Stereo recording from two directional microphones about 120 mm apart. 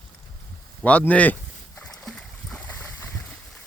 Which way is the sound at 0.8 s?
10° left (ahead or behind).